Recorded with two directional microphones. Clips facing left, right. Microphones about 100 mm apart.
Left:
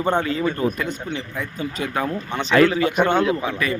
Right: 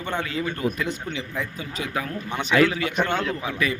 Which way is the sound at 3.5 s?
45° left (ahead or behind).